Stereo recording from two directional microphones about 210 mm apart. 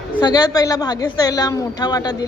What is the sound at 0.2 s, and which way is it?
Speech, 20° left (ahead or behind).